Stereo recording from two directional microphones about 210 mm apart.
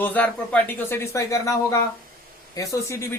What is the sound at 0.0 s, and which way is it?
Speech, 5° left (ahead or behind).